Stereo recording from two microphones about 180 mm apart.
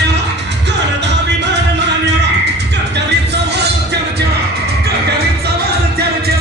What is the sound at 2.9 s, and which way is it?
Music, 70° right (ahead or behind).